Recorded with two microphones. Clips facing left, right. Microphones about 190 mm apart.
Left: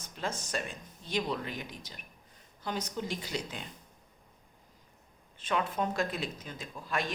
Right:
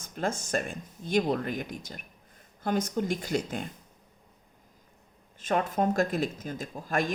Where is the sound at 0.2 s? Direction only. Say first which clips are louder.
Right 6 dB; 50° right (ahead or behind).